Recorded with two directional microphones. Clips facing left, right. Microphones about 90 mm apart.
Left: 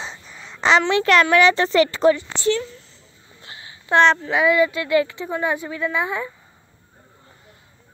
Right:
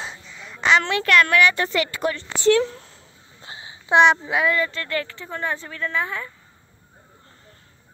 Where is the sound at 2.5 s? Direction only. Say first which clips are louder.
Right 4 dB; 70° right (ahead or behind).